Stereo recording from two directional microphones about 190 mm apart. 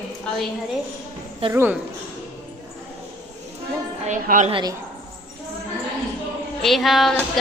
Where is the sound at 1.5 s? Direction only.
10° right (ahead or behind).